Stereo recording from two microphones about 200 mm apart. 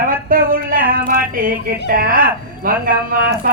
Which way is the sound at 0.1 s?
45° right (ahead or behind).